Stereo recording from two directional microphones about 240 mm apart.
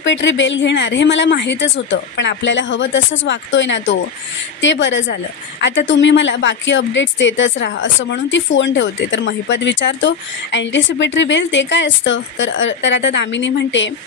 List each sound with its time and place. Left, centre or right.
0.0 s a woman's voice: left